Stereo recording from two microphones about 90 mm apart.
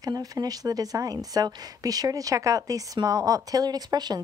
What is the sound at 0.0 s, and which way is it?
Speech, 45° right (ahead or behind).